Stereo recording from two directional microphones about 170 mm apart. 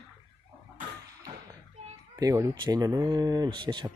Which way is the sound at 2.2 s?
20° right (ahead or behind).